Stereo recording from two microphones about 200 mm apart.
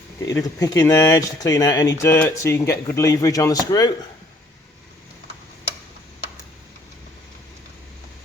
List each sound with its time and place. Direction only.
0.3 s speech: 15° left (ahead or behind)